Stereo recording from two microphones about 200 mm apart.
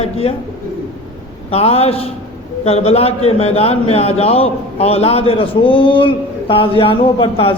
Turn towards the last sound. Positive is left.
turn(degrees=25)  # may be behind; listen again after turning